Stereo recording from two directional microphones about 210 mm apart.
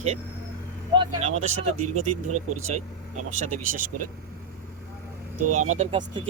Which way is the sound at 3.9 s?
90° right.